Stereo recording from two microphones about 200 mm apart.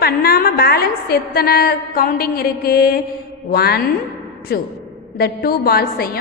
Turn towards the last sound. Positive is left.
turn(degrees=50)  # may be behind; listen again after turning